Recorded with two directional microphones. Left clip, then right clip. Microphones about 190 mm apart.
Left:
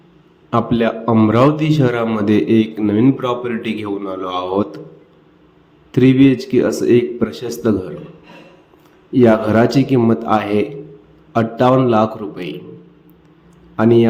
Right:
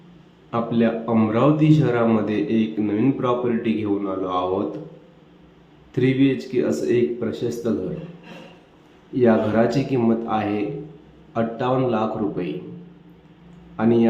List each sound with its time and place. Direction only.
0.5 s a man's voice: 35° left (ahead or behind)
5.9 s a man's voice: 30° left (ahead or behind)
9.1 s a man's voice: 35° left (ahead or behind)
13.7 s a man's voice: 35° left (ahead or behind)